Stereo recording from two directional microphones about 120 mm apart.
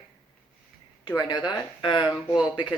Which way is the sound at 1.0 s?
40° left (ahead or behind).